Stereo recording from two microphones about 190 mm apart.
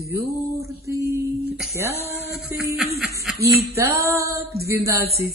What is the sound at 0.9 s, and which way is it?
A woman's voice, 15° right (ahead or behind).